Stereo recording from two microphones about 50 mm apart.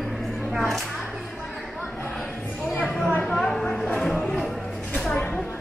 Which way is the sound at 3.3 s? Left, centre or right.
Centre.